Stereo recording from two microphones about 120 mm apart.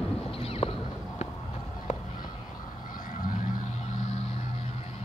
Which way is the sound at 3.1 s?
90° left.